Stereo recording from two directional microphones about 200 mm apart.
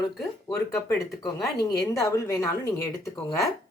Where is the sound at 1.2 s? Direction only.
15° left (ahead or behind).